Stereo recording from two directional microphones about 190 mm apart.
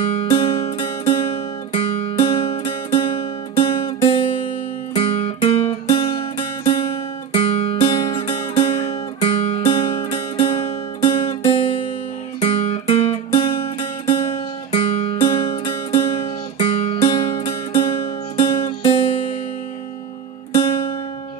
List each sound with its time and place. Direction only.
0.1 s music: 30° left (ahead or behind)
4.9 s guitar: 35° left (ahead or behind)
5.9 s music: 30° left (ahead or behind)
14.7 s music: 35° left (ahead or behind)
16.5 s guitar: 30° left (ahead or behind)
18.4 s music: 30° left (ahead or behind)